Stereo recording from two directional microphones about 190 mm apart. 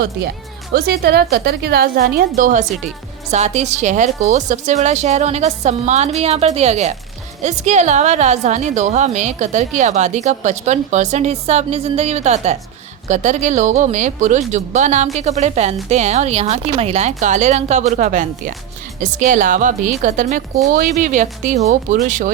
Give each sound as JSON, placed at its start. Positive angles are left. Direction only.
{"t": 0.7, "sound": "a woman's voice", "side_deg": -60}